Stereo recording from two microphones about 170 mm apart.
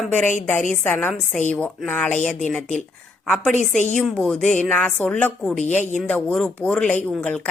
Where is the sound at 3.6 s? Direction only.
45° left (ahead or behind).